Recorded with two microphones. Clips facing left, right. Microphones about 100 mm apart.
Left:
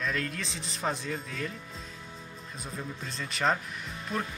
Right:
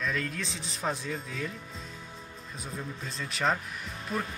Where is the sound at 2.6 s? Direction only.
Centre (ahead or behind).